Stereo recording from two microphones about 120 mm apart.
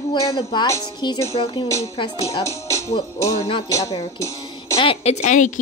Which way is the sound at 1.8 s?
55° left (ahead or behind).